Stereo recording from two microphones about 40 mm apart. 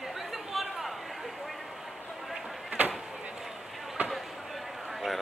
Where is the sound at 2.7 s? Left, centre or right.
Right.